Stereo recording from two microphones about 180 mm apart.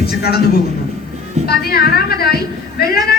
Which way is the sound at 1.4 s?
60° left (ahead or behind).